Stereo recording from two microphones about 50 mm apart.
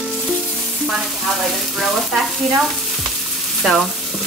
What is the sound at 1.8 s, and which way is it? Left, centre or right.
Frying, centre.